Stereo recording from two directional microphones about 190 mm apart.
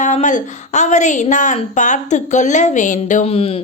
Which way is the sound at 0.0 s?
40° left (ahead or behind).